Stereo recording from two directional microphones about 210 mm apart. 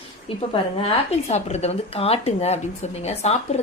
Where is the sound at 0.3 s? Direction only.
25° left (ahead or behind).